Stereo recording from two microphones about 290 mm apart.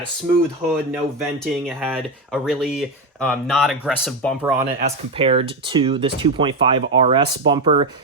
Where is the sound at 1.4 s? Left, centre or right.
Centre.